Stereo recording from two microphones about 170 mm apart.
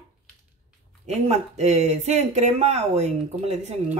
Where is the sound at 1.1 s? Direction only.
40° right (ahead or behind).